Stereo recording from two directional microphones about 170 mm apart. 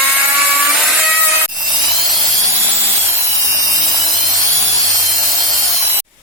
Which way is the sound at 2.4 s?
15° right (ahead or behind).